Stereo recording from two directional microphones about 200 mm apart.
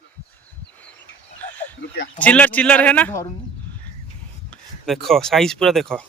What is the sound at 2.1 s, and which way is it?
A man's voice, 5° left (ahead or behind).